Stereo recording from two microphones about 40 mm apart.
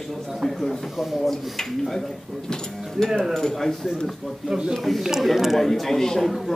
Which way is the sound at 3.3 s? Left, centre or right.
Centre.